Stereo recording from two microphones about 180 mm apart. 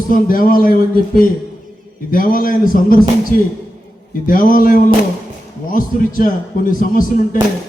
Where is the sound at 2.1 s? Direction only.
50° left (ahead or behind).